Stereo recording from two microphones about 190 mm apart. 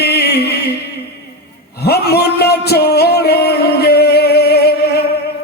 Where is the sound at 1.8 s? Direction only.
55° left (ahead or behind).